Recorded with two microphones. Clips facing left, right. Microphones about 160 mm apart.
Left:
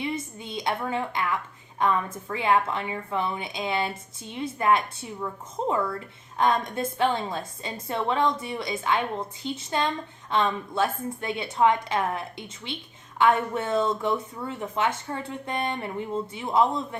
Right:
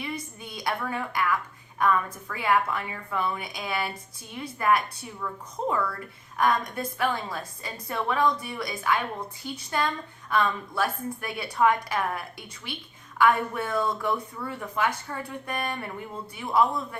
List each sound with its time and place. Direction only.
0.0 s a woman's voice: 25° left (ahead or behind)